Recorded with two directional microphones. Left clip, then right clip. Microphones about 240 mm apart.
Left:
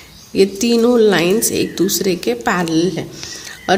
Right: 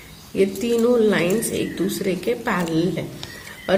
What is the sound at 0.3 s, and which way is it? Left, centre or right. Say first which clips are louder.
A woman's voice: left 6 dB; left.